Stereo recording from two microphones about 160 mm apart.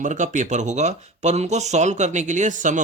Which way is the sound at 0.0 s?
50° right (ahead or behind).